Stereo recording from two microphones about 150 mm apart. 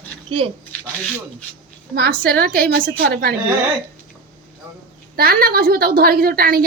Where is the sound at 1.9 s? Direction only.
85° right.